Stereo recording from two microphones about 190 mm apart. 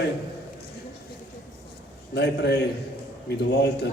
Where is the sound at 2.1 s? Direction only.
60° left (ahead or behind).